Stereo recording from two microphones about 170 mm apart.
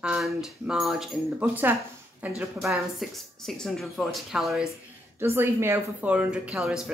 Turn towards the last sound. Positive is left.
turn(degrees=0)  # may be behind; listen again after turning